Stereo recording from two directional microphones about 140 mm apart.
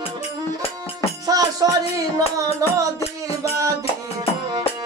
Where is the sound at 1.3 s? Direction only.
25° right (ahead or behind).